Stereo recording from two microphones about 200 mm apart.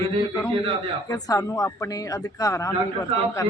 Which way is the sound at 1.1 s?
20° left (ahead or behind).